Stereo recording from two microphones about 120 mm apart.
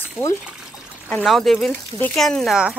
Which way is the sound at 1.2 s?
Centre (ahead or behind).